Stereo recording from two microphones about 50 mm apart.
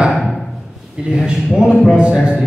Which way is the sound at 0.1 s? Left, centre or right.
Centre.